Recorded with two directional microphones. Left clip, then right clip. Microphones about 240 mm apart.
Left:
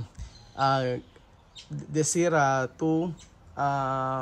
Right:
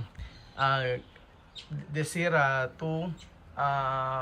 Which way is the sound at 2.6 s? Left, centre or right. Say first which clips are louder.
Left 7 dB; left.